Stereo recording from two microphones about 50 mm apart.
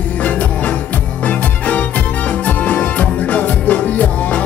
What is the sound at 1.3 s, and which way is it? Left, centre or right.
Music, left.